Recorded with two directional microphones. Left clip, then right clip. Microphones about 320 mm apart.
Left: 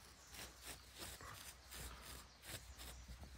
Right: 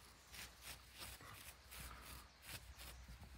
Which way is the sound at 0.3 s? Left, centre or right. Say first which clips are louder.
Even; left.